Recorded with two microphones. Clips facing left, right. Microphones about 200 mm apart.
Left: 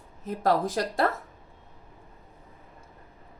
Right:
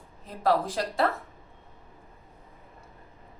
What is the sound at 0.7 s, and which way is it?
Speech, 45° left (ahead or behind).